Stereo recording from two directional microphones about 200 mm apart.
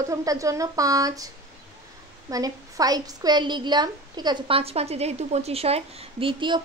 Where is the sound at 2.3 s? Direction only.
20° right (ahead or behind).